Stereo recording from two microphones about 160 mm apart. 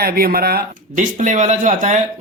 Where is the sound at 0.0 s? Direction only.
70° right (ahead or behind).